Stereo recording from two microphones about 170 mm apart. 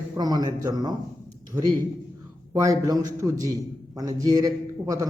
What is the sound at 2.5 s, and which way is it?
A man's voice, 20° right (ahead or behind).